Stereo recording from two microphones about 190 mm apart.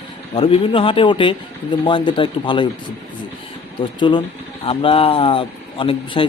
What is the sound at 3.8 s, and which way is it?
Speech, 25° left (ahead or behind).